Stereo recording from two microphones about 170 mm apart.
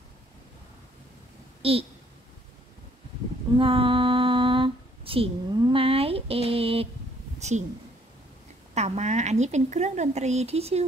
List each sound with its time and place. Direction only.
1.6 s a woman's voice: 35° right (ahead or behind)
3.5 s female singing: 30° right (ahead or behind)
7.3 s a sound: 40° right (ahead or behind)
8.7 s a woman's voice: 40° right (ahead or behind)